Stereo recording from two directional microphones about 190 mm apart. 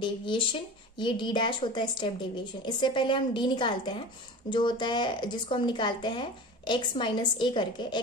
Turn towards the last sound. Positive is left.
turn(degrees=25)  # may be behind; listen again after turning